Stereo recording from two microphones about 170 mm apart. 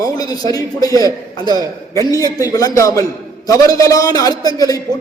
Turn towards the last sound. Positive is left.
turn(degrees=20)  # may be behind; listen again after turning